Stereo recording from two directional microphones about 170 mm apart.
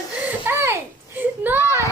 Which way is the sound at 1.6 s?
15° left (ahead or behind).